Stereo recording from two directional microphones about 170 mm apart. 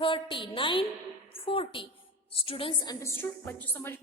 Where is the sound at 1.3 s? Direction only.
30° left (ahead or behind).